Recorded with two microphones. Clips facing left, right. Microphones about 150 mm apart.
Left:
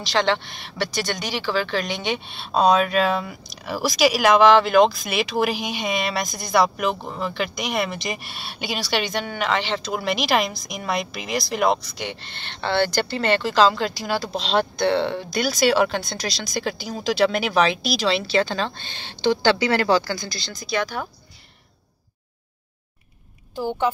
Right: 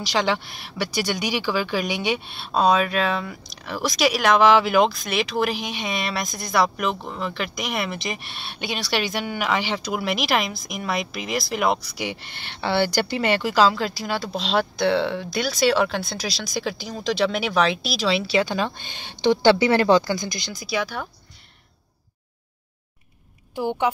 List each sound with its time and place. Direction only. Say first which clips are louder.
0.0 s a woman's voice: left 1 dB; 10° right (ahead or behind)
23.5 s a woman's voice: even; 15° right (ahead or behind)